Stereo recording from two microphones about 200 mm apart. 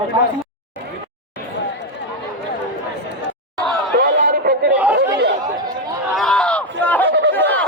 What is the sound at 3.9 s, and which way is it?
Chatter, 45° right (ahead or behind).